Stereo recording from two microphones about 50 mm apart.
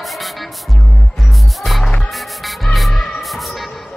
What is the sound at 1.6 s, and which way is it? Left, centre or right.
Music, centre.